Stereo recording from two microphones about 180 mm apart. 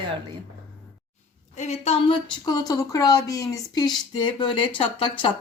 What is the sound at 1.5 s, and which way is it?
Speech, 40° left (ahead or behind).